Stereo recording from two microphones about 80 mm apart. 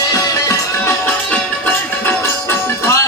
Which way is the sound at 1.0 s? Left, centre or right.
Centre.